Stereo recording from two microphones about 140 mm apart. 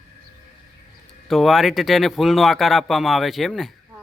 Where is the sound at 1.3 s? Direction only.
Centre (ahead or behind).